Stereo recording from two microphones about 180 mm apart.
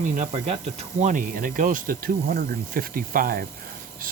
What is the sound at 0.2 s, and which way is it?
Speech, 40° right (ahead or behind).